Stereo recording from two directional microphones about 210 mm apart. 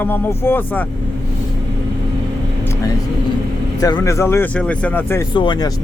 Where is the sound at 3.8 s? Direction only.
15° left (ahead or behind).